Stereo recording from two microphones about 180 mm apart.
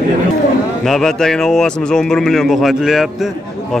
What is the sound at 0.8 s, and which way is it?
A man's voice, centre (ahead or behind).